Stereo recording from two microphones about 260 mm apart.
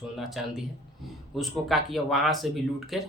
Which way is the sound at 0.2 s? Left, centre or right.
Centre.